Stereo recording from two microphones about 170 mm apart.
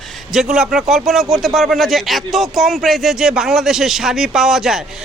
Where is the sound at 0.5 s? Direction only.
5° right (ahead or behind).